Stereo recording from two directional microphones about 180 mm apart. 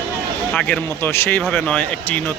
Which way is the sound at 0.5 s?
5° left (ahead or behind).